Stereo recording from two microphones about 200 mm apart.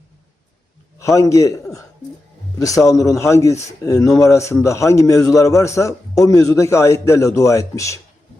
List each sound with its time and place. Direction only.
0.9 s a man's voice: 15° left (ahead or behind)